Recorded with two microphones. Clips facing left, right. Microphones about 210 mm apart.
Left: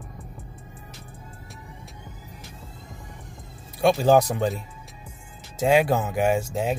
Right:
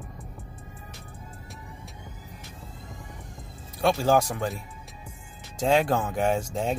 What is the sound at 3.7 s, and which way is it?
Speech, 15° left (ahead or behind).